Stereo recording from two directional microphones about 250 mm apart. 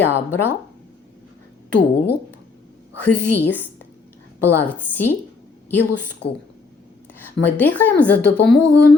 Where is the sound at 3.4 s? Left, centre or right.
Centre.